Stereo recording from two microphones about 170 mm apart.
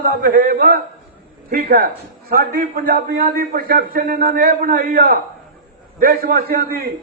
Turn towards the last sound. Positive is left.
turn(degrees=-60)  # may be behind; listen again after turning